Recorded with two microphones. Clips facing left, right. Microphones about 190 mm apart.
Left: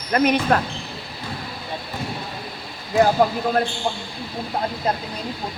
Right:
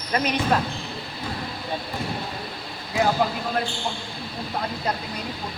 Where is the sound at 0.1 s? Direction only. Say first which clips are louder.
Left 5 dB; 55° left (ahead or behind).